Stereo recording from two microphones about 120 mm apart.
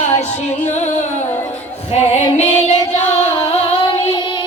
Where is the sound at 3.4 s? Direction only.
50° left (ahead or behind).